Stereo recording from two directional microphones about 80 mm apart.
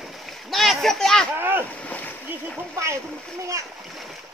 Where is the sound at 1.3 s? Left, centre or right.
Right.